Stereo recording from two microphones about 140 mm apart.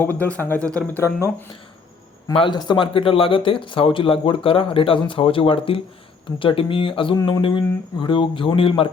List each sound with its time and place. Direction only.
0.0 s speech: 15° left (ahead or behind)
2.3 s speech: 35° left (ahead or behind)